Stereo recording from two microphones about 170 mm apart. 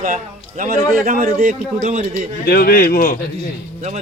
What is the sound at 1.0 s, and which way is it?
Speech, 60° right (ahead or behind).